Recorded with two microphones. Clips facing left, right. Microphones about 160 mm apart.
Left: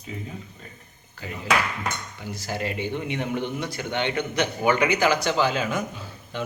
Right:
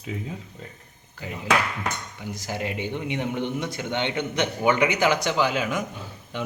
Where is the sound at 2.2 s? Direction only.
20° right (ahead or behind).